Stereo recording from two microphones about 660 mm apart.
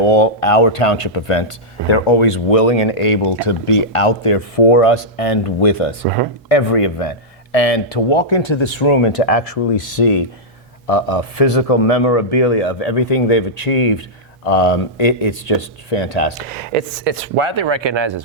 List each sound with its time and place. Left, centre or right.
0.0 s speech: left
9.1 s speech: left
10.8 s speech: left
16.5 s speech: right